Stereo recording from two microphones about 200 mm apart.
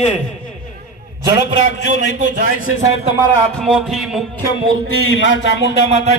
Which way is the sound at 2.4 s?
40° right (ahead or behind).